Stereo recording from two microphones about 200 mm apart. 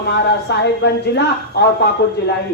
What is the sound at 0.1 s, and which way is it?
A man's voice, 60° left (ahead or behind).